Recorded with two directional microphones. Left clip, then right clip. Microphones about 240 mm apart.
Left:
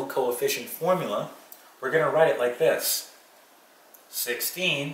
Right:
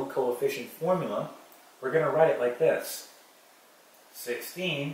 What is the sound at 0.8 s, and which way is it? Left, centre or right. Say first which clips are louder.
Speech: left 3 dB; centre.